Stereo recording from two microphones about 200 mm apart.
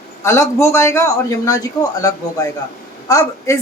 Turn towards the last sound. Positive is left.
turn(degrees=15)  # may be behind; listen again after turning